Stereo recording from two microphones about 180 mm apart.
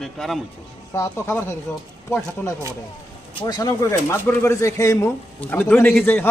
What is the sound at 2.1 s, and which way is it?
Speech, 5° left (ahead or behind).